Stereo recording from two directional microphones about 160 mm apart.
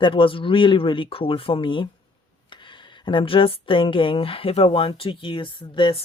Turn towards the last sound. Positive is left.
turn(degrees=35)  # may be behind; listen again after turning